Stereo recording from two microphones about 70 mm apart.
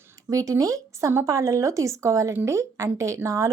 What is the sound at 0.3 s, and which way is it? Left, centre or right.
A woman's voice, right.